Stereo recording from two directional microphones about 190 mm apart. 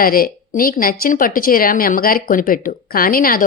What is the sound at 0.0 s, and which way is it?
A woman's voice, 50° left (ahead or behind).